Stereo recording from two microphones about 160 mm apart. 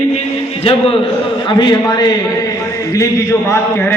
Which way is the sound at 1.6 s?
25° left (ahead or behind).